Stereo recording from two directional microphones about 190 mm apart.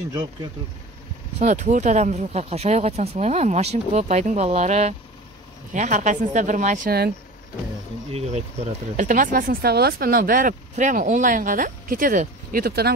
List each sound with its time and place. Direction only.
1.4 s speech: 40° right (ahead or behind)
8.1 s speech: 35° right (ahead or behind); by 12.9 s 55° right (ahead or behind)